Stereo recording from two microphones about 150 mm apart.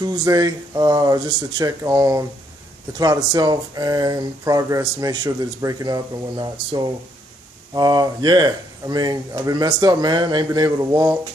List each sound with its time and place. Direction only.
0.0 s speech: 25° right (ahead or behind)